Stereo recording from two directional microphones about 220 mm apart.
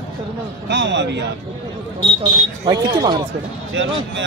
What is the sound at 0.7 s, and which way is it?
Speech, 50° right (ahead or behind).